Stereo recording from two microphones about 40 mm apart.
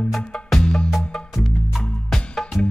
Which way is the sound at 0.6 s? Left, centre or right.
Left.